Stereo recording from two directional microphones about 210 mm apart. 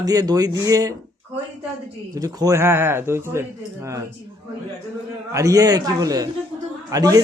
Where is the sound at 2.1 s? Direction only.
15° right (ahead or behind).